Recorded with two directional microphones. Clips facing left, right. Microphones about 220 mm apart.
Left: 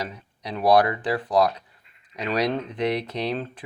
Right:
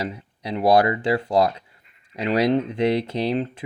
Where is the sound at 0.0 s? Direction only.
25° right (ahead or behind).